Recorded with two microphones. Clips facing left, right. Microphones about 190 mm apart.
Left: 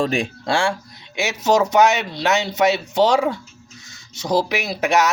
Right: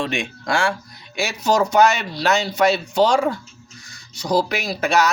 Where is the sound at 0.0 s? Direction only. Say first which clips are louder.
Left 4 dB; 35° left (ahead or behind).